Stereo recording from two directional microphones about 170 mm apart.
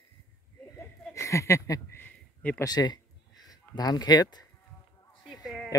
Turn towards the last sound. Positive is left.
turn(degrees=0)  # may be behind; listen again after turning